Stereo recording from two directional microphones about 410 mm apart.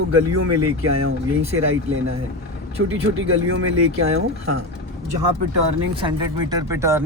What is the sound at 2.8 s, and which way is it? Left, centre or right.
Speech, right.